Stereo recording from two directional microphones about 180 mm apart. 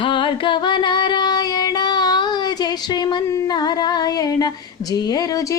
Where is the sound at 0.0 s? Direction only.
30° left (ahead or behind).